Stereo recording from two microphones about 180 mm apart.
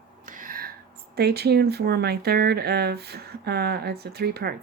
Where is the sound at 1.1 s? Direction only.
60° right (ahead or behind).